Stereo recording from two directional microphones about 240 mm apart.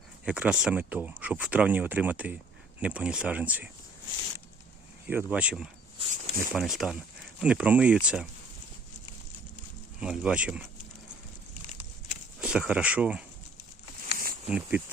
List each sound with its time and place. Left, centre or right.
0.3 s speech: centre
5.0 s speech: centre
6.0 s speech: right
6.5 s speech: centre
10.0 s speech: centre
12.4 s speech: centre
14.1 s a sound: right
14.4 s speech: centre